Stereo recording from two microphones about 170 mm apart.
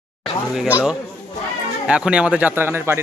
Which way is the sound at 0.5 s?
5° right (ahead or behind).